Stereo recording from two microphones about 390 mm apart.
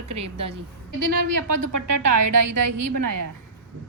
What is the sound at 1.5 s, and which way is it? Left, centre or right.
A woman's voice, right.